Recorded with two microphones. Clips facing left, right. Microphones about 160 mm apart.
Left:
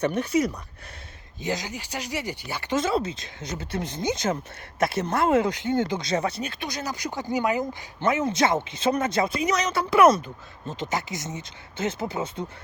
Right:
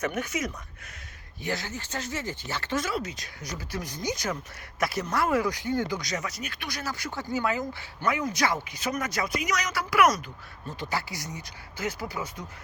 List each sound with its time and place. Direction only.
0.0 s speech: 30° left (ahead or behind)
1.4 s speech: 20° left (ahead or behind)